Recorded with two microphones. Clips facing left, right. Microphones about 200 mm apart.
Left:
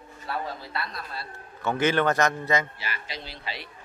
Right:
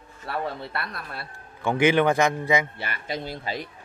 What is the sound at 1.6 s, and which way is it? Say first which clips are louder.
A man's voice: right 3 dB; 15° right (ahead or behind).